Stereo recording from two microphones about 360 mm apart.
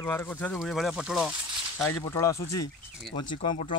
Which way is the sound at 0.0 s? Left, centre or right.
Centre.